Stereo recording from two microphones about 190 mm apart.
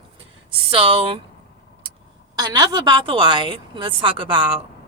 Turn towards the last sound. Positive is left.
turn(degrees=-25)  # may be behind; listen again after turning